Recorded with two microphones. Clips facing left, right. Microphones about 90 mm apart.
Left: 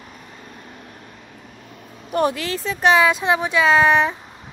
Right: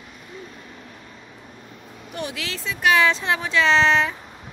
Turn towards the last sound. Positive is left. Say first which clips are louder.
# left 3 dB
turn(degrees=15)  # may be behind; listen again after turning